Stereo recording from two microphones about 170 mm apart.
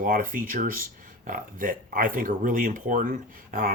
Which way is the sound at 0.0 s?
55° right (ahead or behind).